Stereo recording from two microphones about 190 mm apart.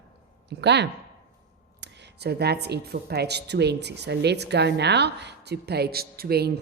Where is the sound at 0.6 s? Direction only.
65° right (ahead or behind).